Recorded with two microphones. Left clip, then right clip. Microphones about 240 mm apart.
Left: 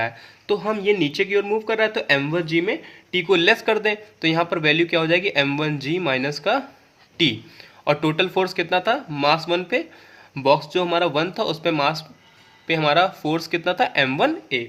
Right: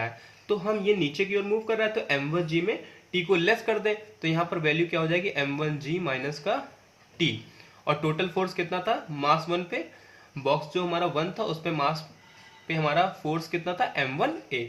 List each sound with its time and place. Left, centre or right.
0.0 s speech: left
7.9 s speech: left